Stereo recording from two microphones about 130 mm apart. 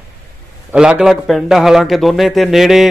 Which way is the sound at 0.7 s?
5° right (ahead or behind).